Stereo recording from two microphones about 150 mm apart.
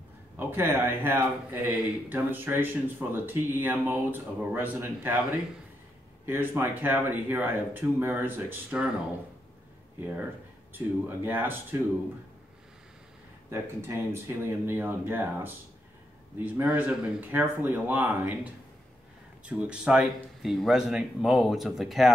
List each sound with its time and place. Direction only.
0.4 s speech: 15° right (ahead or behind)
6.2 s speech: 15° right (ahead or behind)
9.9 s speech: 10° right (ahead or behind)
11.2 s speech: 15° right (ahead or behind)
13.5 s speech: 15° right (ahead or behind); by 22.1 s centre (ahead or behind)